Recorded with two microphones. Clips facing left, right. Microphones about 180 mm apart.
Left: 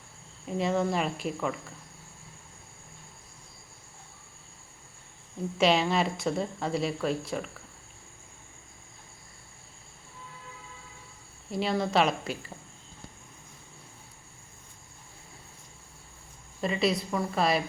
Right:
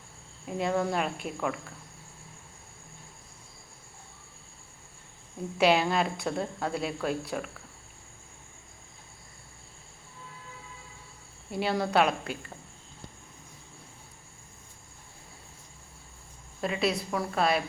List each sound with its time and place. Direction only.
0.4 s speech: centre (ahead or behind)
5.5 s speech: 5° right (ahead or behind)
11.5 s speech: centre (ahead or behind)
16.6 s speech: centre (ahead or behind)